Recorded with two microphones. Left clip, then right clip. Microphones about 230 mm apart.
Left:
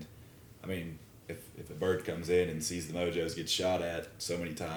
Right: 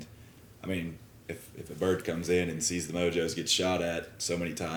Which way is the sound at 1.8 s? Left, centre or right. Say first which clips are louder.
Right 3 dB; right.